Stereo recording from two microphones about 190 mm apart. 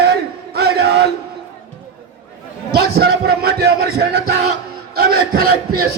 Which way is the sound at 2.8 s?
55° right (ahead or behind).